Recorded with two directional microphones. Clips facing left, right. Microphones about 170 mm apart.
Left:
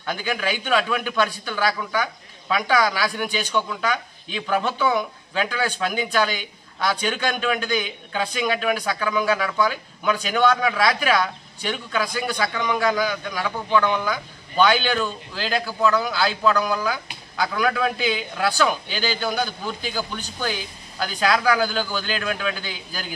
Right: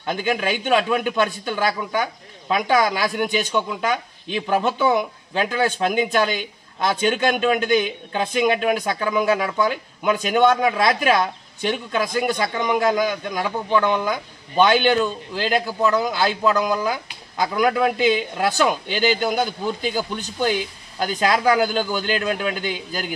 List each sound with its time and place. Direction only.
0.0 s a man's voice: 20° right (ahead or behind)